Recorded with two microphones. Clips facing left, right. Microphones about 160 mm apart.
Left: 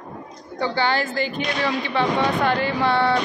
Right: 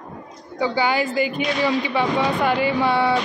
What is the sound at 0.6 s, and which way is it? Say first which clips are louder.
A woman's voice: right 2 dB; 10° right (ahead or behind).